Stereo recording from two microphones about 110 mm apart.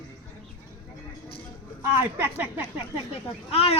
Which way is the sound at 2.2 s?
20° right (ahead or behind).